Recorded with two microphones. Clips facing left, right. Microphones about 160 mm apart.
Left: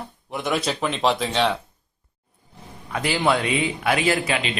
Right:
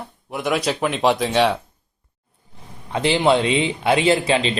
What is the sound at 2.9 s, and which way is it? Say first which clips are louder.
Speech: right 5 dB; 25° right (ahead or behind).